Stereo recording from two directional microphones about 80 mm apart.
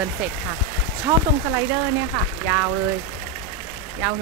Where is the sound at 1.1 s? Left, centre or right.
Right.